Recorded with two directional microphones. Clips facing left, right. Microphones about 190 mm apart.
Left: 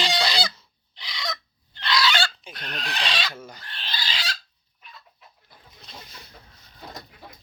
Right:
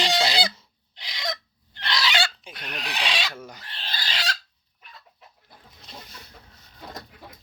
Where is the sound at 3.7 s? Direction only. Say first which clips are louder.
Left 3 dB; 40° right (ahead or behind).